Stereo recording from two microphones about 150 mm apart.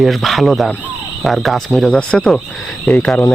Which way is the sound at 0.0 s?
Centre (ahead or behind).